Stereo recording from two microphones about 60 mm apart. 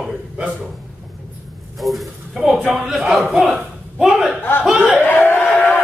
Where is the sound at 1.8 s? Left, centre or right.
Centre.